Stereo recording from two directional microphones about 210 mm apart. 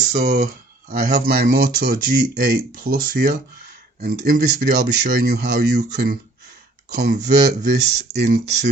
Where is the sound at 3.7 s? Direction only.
45° right (ahead or behind).